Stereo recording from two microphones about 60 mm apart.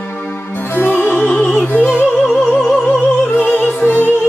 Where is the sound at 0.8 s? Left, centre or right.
Left.